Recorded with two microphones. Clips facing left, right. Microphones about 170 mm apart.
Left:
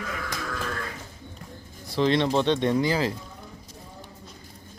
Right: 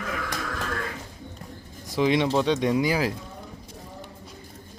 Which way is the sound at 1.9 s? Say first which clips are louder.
Even; 10° right (ahead or behind).